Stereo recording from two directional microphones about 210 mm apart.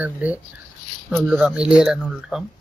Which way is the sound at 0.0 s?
5° right (ahead or behind).